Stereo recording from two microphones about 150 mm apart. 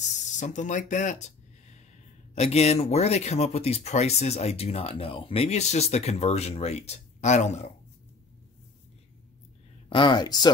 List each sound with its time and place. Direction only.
0.0 s a sound: 55° left (ahead or behind)
2.3 s speech: 45° left (ahead or behind)
9.8 s speech: 35° left (ahead or behind)